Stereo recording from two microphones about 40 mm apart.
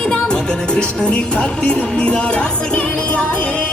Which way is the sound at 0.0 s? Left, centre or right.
Left.